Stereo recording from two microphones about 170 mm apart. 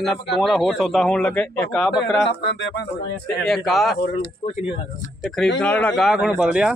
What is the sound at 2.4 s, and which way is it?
Speech, 80° left.